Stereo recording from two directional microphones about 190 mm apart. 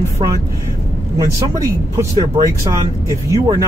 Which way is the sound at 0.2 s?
25° right (ahead or behind).